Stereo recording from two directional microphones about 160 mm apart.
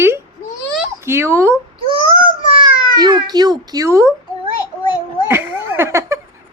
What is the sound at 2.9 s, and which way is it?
A child's voice, 25° right (ahead or behind).